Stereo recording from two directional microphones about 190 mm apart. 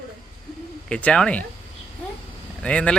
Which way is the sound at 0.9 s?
5° left (ahead or behind).